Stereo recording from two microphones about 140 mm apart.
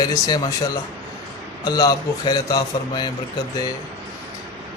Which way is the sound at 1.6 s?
30° left (ahead or behind).